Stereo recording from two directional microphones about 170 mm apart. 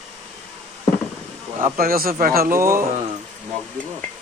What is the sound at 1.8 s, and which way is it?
Speech, 60° right (ahead or behind).